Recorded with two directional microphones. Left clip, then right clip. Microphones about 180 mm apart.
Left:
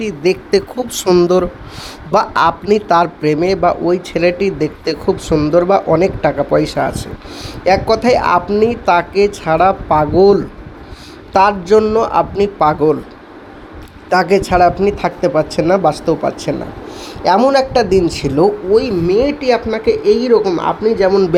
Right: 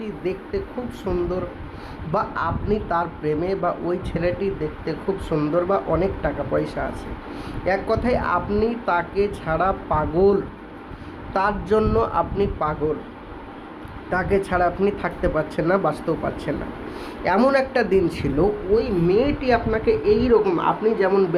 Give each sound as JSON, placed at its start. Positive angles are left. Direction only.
{"t": 0.0, "sound": "a man's voice", "side_deg": 50}
{"t": 7.3, "sound": "speech", "side_deg": 35}
{"t": 14.1, "sound": "speech", "side_deg": 40}
{"t": 18.3, "sound": "a man's voice", "side_deg": 45}
{"t": 19.0, "sound": "speech", "side_deg": 30}